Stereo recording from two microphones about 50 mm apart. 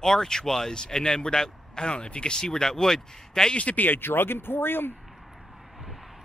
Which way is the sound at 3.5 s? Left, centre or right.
Left.